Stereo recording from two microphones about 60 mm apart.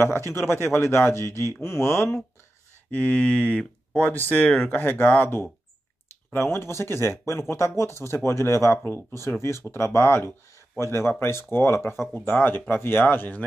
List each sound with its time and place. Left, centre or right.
0.0 s speech: left
2.9 s speech: left